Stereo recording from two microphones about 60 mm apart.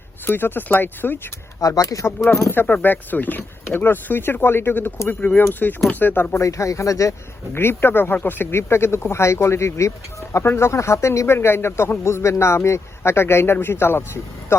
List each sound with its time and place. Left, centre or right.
0.3 s speech: left
1.6 s speech: left
2.5 s speech: left
6.3 s speech: left
7.5 s speech: left
11.3 s speech: left